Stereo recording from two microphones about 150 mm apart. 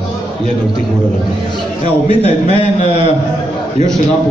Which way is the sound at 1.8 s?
35° right (ahead or behind).